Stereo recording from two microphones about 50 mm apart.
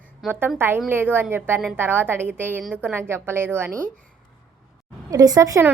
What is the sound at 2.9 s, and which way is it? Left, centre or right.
Speech, right.